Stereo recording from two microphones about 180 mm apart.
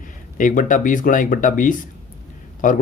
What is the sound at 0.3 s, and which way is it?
Speech, 45° left (ahead or behind).